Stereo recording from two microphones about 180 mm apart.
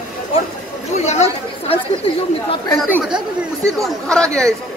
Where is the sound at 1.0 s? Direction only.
40° left (ahead or behind).